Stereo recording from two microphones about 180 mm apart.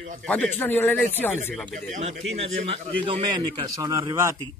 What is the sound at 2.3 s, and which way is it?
A man's voice, 30° right (ahead or behind).